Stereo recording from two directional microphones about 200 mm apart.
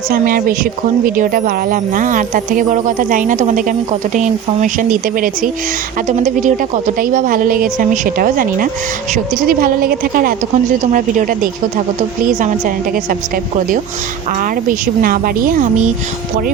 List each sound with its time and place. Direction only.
0.1 s a woman's voice: 45° right (ahead or behind)